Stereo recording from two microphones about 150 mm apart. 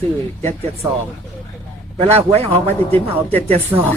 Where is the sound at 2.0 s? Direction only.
40° right (ahead or behind).